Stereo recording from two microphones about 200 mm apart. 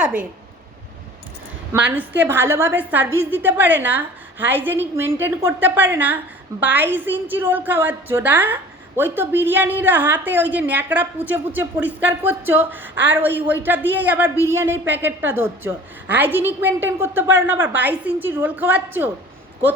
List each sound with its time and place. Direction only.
0.0 s a woman's voice: 5° right (ahead or behind)
2.0 s a woman's voice: 10° right (ahead or behind)